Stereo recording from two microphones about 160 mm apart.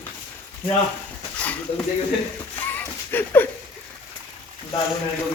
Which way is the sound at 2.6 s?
10° left (ahead or behind).